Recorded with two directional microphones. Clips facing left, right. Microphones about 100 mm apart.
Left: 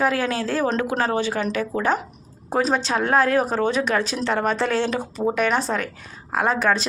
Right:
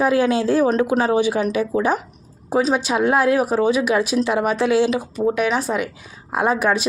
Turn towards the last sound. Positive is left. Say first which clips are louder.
# right 2 dB
turn(degrees=-15)  # may be behind; listen again after turning